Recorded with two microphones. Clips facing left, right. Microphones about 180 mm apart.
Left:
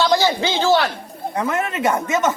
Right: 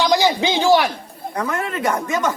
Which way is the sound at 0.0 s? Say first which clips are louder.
Even; 15° right (ahead or behind).